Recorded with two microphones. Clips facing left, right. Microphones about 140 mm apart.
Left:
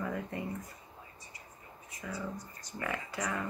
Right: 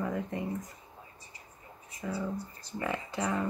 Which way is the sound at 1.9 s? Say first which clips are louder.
Right 5 dB; 30° right (ahead or behind).